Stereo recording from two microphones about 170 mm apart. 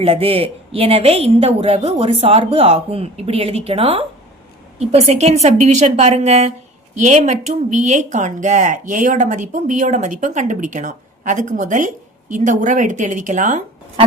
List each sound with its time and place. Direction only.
0.0 s a woman's voice: 35° right (ahead or behind)